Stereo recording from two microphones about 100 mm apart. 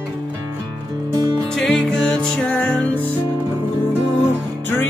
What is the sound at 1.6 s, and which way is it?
Music, 5° left (ahead or behind).